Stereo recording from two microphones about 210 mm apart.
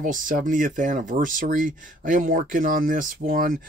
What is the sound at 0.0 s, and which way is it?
Speech, 40° right (ahead or behind).